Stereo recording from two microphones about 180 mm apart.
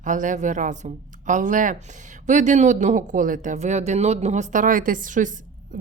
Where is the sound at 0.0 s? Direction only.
45° right (ahead or behind).